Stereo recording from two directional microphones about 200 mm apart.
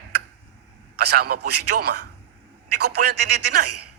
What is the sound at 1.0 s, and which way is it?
A man's voice, 50° right (ahead or behind).